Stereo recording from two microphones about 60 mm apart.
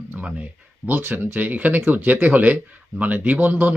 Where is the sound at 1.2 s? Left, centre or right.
Right.